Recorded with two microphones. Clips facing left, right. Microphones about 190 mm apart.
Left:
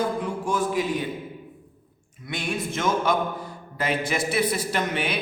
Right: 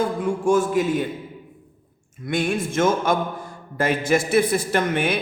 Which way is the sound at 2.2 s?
50° right (ahead or behind).